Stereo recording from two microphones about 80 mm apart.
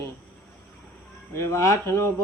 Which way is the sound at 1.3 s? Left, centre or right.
Left.